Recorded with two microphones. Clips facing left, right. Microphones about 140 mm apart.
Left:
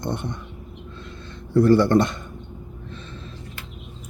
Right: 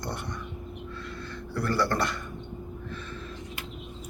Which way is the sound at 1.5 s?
25° left (ahead or behind).